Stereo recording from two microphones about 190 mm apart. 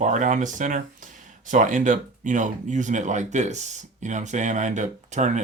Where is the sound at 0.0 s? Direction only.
40° right (ahead or behind).